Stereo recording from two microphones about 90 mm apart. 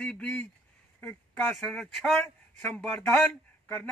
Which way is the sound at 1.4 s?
5° left (ahead or behind).